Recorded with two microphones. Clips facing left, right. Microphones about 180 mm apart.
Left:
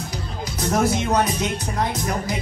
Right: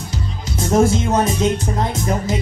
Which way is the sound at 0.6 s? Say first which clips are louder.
Right 5 dB; 25° right (ahead or behind).